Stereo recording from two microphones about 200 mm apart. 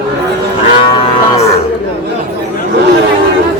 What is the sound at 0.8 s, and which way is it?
Moo, 25° left (ahead or behind).